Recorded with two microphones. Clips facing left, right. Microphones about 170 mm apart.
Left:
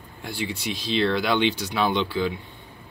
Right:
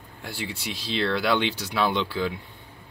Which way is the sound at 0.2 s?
5° right (ahead or behind).